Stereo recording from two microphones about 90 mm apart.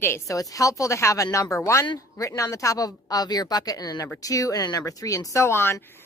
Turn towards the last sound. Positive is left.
turn(degrees=25)  # may be behind; listen again after turning